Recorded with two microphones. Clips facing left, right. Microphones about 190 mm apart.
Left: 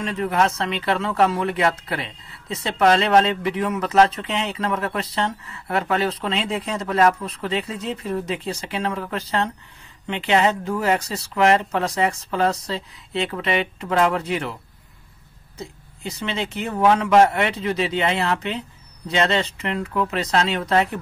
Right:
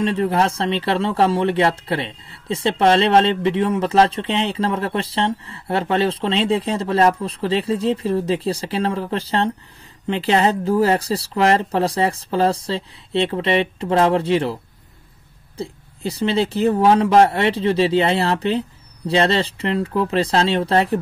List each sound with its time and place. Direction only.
0.0 s speech: 30° right (ahead or behind)